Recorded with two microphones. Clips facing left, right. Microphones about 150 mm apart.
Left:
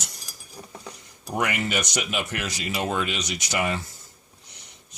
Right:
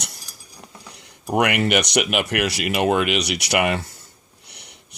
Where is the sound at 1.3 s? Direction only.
70° right (ahead or behind).